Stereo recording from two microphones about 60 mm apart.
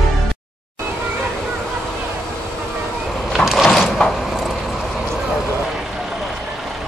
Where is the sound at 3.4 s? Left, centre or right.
Centre.